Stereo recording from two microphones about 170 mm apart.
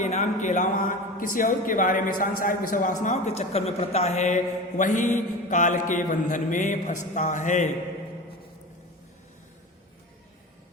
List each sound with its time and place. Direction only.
0.0 s a man's voice: 45° left (ahead or behind)